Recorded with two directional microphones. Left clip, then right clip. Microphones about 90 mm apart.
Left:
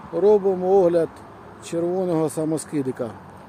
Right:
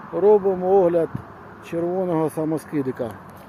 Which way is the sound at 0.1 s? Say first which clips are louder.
Right 1 dB; 20° left (ahead or behind).